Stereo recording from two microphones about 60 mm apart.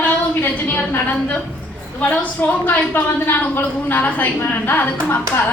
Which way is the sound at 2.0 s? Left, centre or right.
Left.